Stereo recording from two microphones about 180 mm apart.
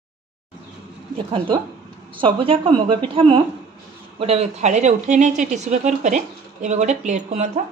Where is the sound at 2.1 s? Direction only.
30° right (ahead or behind).